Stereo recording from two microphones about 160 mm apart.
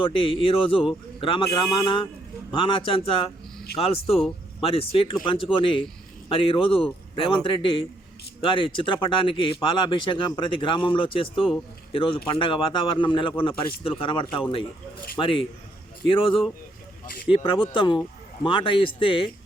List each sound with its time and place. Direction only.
0.0 s speech: 35° left (ahead or behind)